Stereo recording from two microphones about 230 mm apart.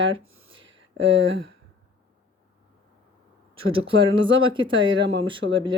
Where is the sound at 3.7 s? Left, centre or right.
Right.